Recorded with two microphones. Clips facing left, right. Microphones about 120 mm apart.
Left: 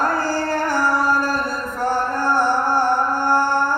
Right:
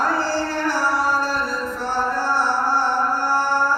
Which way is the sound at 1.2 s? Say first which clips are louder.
Left 1 dB; 50° left (ahead or behind).